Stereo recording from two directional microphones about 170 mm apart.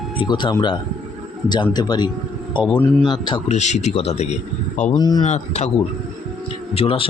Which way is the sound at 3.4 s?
40° left (ahead or behind).